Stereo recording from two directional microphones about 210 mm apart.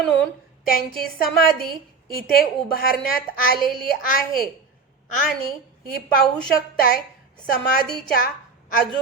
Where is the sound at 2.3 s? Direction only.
45° left (ahead or behind).